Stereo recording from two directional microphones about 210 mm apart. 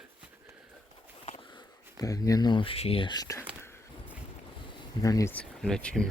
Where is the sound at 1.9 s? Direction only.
15° left (ahead or behind).